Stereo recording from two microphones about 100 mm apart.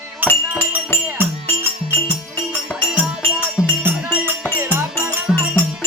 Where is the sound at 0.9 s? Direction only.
20° left (ahead or behind).